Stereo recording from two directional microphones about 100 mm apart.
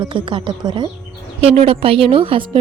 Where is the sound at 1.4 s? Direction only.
85° right; by 2.6 s 65° right (ahead or behind).